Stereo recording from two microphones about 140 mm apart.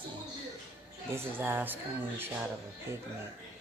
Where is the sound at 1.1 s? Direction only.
15° right (ahead or behind).